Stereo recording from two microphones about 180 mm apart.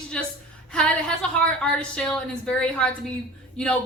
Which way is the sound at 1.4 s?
5° left (ahead or behind).